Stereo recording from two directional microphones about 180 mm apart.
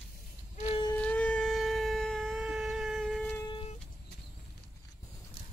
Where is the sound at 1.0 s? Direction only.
5° left (ahead or behind).